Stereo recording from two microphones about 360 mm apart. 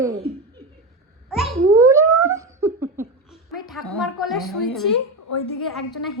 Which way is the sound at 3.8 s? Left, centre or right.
Centre.